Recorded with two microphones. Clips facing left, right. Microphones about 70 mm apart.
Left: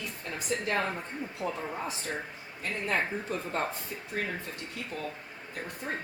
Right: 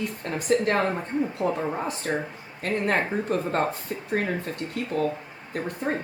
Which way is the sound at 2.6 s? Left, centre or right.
Right.